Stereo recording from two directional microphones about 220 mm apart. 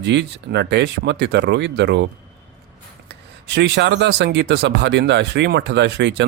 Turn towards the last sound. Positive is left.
turn(degrees=-50)  # may be behind; listen again after turning